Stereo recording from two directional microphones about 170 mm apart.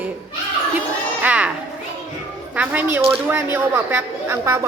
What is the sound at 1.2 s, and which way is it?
Children playing, 5° right (ahead or behind).